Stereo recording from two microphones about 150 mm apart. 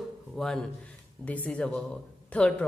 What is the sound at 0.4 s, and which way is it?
A man's voice, 5° left (ahead or behind).